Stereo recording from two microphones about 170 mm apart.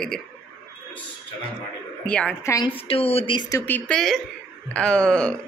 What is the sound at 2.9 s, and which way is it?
A woman's voice, 35° left (ahead or behind).